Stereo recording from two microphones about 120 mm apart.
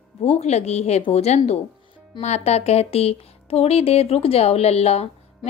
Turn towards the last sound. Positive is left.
turn(degrees=60)  # may be behind; listen again after turning